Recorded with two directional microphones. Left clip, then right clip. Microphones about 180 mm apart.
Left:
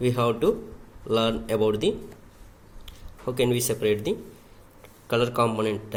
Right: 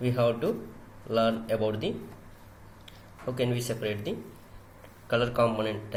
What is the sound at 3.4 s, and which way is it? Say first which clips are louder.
Speech: left 7 dB; 60° left (ahead or behind).